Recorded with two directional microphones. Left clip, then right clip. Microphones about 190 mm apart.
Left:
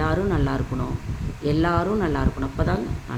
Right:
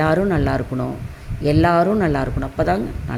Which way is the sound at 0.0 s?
35° right (ahead or behind).